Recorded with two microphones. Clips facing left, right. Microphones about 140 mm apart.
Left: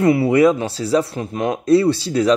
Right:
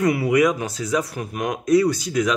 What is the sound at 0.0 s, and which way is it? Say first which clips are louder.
Speech: left 5 dB; 30° left (ahead or behind).